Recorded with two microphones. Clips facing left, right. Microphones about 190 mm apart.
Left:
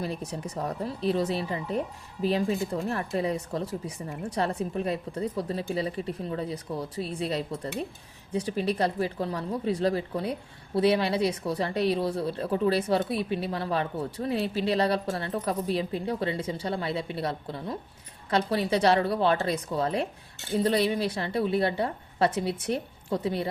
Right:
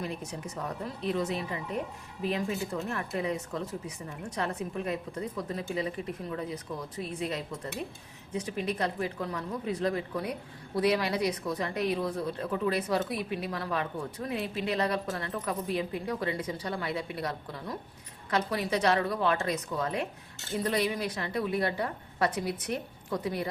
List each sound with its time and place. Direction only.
0.0 s a woman's voice: 35° left (ahead or behind)